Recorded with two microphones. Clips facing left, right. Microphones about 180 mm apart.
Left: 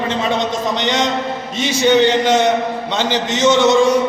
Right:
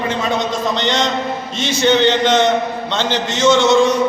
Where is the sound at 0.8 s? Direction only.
15° left (ahead or behind).